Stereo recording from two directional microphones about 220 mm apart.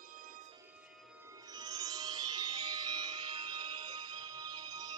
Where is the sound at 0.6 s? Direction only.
5° right (ahead or behind).